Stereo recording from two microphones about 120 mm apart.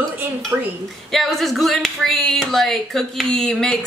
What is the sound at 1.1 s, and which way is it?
Speech, centre (ahead or behind).